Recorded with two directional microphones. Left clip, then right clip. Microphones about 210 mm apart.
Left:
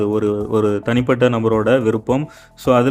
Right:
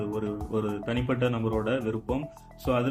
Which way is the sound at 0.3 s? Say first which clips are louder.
Left 14 dB; 50° left (ahead or behind).